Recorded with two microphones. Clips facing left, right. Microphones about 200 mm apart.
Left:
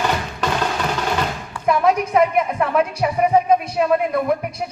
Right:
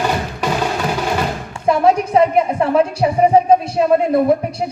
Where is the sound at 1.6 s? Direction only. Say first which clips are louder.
Right 3 dB; 30° right (ahead or behind).